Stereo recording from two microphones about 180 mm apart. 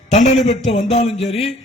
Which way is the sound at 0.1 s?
40° left (ahead or behind).